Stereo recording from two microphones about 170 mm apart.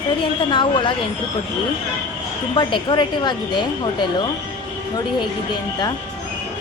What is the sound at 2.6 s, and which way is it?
Speech, 25° left (ahead or behind).